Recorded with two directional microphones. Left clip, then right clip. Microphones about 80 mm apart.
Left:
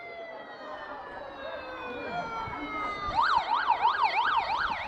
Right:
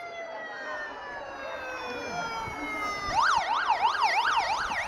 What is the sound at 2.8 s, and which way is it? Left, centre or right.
Emergency vehicle, centre.